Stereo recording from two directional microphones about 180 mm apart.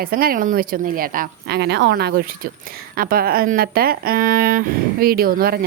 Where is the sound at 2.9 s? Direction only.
55° right (ahead or behind).